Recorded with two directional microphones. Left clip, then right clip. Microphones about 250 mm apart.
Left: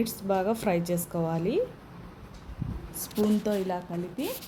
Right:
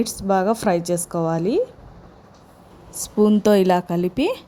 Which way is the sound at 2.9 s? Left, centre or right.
Right.